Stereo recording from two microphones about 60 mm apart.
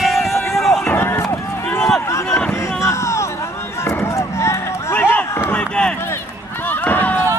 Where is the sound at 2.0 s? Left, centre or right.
Left.